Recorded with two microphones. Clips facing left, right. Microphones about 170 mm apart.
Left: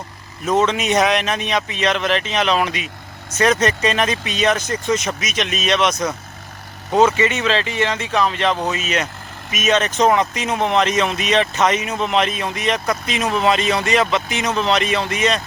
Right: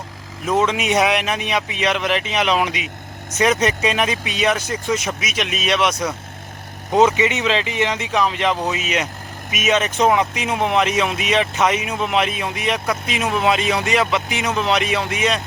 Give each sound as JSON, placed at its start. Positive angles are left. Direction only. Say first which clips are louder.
{"t": 0.4, "sound": "speech", "louder": "left 1 dB", "side_deg": -10}